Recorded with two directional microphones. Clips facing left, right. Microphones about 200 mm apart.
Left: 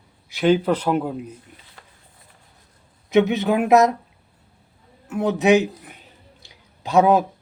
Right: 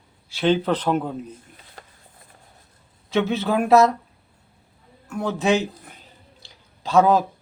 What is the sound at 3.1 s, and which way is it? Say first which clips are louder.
Speech: left 4 dB; 15° left (ahead or behind).